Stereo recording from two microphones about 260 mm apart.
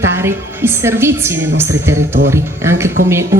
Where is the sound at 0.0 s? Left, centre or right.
Centre.